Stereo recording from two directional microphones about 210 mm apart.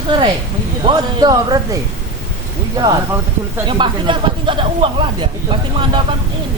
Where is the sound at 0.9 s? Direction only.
20° right (ahead or behind).